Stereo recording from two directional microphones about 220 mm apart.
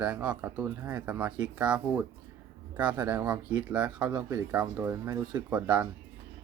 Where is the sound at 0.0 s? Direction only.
5° right (ahead or behind).